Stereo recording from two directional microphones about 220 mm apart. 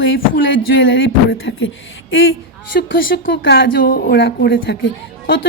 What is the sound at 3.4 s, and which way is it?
Speech, 50° left (ahead or behind).